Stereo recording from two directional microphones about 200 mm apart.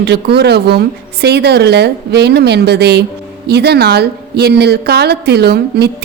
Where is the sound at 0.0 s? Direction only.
55° right (ahead or behind).